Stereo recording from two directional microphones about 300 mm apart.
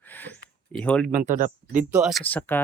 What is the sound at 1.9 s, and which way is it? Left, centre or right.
Speech, centre.